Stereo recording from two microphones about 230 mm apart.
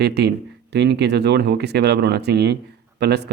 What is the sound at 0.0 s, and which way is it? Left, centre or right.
Speech, right.